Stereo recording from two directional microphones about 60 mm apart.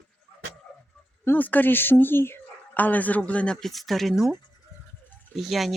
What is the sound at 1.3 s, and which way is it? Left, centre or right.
Speech, left.